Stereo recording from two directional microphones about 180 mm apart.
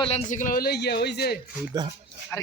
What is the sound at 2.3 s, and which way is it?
Speech, 10° left (ahead or behind).